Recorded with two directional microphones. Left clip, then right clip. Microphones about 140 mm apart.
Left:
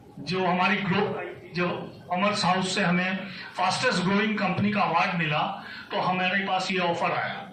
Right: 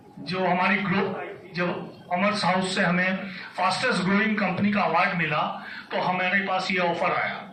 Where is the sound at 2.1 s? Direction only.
35° left (ahead or behind).